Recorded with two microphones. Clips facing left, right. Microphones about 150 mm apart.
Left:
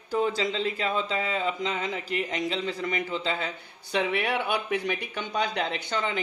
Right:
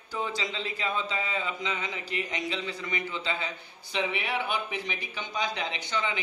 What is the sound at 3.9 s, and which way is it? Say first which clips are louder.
Speech: left 4 dB; 60° left (ahead or behind).